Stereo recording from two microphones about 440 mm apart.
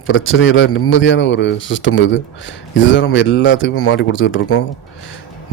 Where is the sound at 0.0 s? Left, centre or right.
Left.